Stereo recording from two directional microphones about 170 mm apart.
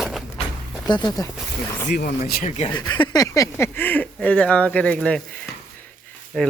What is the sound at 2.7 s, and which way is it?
Speech, 25° left (ahead or behind).